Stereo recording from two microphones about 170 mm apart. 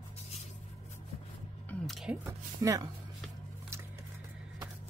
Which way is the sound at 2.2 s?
20° right (ahead or behind).